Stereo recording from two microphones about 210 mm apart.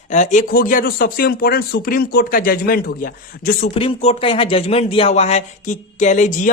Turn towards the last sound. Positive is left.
turn(degrees=40)  # may be behind; listen again after turning